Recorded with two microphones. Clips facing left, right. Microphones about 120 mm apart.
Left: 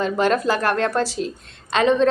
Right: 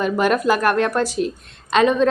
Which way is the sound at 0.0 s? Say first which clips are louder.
Right 1 dB; 15° right (ahead or behind).